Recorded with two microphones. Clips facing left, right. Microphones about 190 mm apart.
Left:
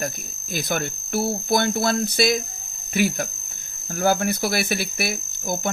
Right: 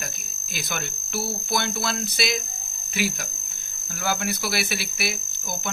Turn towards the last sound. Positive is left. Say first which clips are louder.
# left 6 dB
turn(degrees=50)  # may be behind; listen again after turning